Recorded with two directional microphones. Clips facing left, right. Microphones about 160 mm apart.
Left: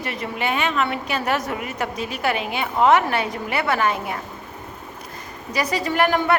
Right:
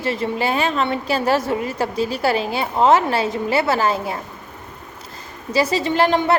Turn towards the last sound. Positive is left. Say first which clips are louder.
# right 2 dB
turn(degrees=-25)  # may be behind; listen again after turning